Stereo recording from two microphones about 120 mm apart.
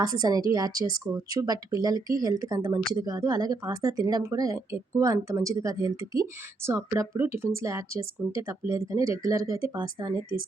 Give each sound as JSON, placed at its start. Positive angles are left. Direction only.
{"t": 0.0, "sound": "speech", "side_deg": -30}
{"t": 9.7, "sound": "speech", "side_deg": -40}